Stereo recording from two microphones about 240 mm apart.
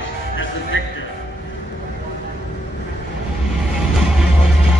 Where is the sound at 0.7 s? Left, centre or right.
Left.